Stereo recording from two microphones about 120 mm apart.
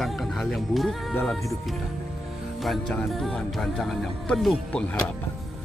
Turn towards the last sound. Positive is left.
turn(degrees=10)  # may be behind; listen again after turning